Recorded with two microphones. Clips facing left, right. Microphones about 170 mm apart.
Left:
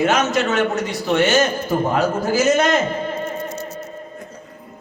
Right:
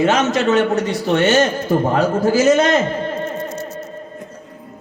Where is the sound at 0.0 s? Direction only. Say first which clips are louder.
Right 2 dB; 30° right (ahead or behind).